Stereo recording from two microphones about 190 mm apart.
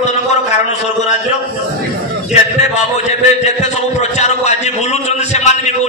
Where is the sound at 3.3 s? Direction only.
35° left (ahead or behind).